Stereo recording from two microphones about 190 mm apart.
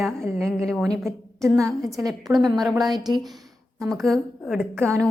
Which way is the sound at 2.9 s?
20° right (ahead or behind).